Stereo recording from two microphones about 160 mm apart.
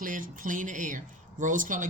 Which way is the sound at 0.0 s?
60° right (ahead or behind).